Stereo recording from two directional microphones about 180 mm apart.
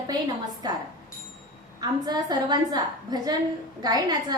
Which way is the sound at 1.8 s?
20° right (ahead or behind).